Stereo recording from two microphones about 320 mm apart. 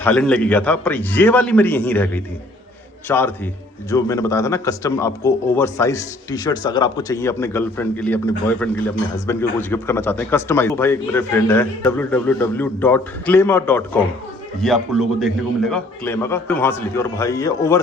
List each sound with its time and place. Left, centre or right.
0.0 s a man's voice: centre